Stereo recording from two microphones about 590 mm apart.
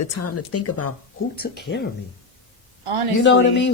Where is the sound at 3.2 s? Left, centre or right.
Centre.